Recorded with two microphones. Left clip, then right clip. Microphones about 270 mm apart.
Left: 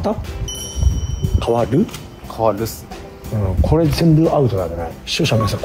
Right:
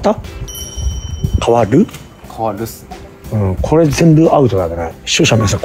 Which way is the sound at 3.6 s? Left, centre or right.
Right.